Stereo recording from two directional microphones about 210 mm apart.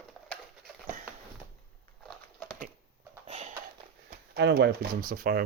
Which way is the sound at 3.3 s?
30° right (ahead or behind).